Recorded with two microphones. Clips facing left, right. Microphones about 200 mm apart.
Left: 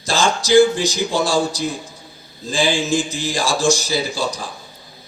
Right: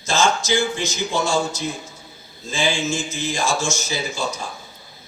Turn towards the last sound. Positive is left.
turn(degrees=35)  # may be behind; listen again after turning